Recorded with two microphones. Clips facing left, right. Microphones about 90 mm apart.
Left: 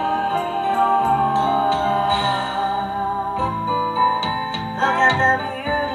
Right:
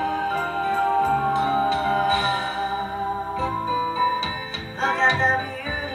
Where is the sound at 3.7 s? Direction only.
25° left (ahead or behind).